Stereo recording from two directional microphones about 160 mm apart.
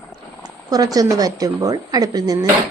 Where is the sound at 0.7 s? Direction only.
25° right (ahead or behind).